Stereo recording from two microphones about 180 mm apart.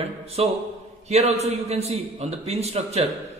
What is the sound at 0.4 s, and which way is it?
A man's voice, 35° right (ahead or behind).